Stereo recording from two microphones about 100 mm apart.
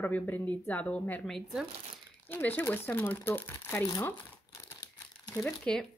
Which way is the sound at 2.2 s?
20° left (ahead or behind).